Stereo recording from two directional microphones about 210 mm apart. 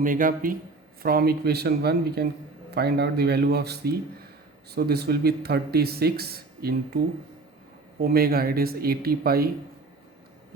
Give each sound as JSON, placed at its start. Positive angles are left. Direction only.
{"t": 0.0, "sound": "a man's voice", "side_deg": -40}